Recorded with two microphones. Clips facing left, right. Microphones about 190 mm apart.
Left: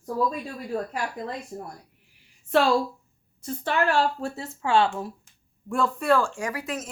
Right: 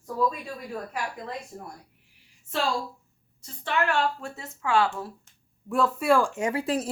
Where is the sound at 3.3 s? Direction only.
50° left (ahead or behind); by 4.9 s 30° left (ahead or behind).